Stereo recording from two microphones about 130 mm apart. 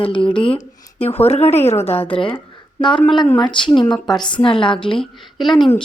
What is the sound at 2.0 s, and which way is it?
A woman's voice, 45° left (ahead or behind).